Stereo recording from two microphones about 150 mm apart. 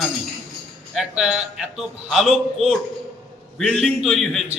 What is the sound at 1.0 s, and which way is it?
A man's voice, 5° right (ahead or behind).